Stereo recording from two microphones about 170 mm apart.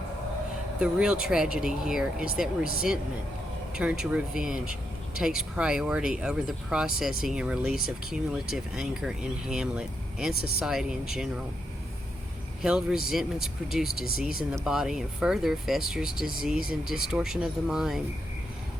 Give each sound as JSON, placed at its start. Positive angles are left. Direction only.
{"t": 0.8, "sound": "speech", "side_deg": -5}
{"t": 3.8, "sound": "speech", "side_deg": -5}
{"t": 12.6, "sound": "speech", "side_deg": -5}